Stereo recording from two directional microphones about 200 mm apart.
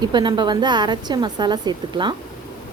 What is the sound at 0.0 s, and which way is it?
A woman's voice, 20° right (ahead or behind).